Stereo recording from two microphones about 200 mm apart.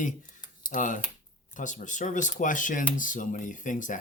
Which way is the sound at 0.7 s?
40° left (ahead or behind).